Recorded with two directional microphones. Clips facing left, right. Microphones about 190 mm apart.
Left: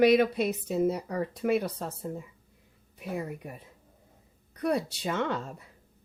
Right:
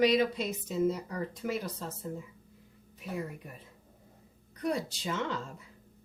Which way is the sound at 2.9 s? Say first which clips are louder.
Left 3 dB; 60° left (ahead or behind).